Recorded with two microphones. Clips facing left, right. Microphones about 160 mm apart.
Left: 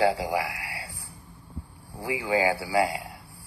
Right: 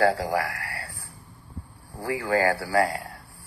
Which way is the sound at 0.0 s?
15° left (ahead or behind).